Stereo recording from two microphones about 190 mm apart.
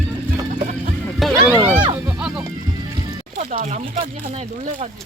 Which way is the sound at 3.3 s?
35° right (ahead or behind).